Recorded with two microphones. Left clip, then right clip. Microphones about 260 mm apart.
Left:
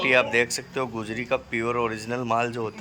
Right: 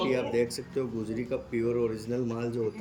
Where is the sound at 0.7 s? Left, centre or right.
Left.